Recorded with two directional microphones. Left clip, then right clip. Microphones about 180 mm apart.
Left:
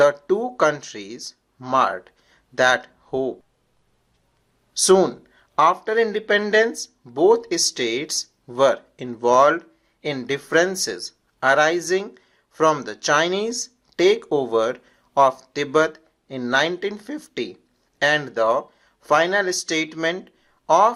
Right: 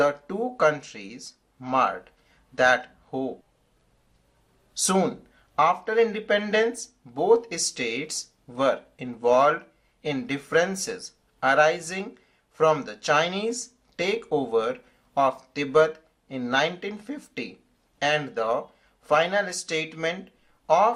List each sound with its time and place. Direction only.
0.0 s speech: 40° left (ahead or behind)
4.8 s speech: 35° left (ahead or behind)